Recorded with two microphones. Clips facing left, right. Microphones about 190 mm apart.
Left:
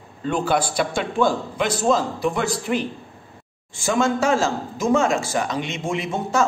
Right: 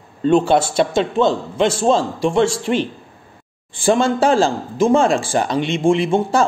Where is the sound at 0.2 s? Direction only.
25° right (ahead or behind).